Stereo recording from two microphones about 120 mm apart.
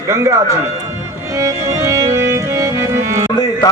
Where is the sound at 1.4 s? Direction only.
25° right (ahead or behind).